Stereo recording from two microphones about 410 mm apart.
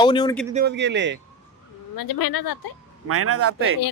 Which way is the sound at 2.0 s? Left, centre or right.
Left.